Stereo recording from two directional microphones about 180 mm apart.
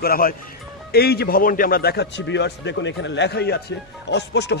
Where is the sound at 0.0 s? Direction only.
55° left (ahead or behind).